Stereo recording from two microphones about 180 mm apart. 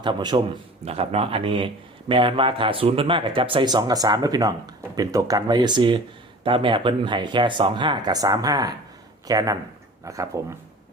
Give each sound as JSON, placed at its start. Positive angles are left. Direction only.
{"t": 0.0, "sound": "speech", "side_deg": -25}
{"t": 0.9, "sound": "speech", "side_deg": -35}